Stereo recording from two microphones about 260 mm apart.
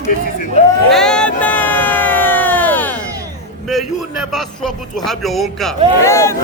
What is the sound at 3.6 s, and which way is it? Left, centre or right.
A man's voice, centre.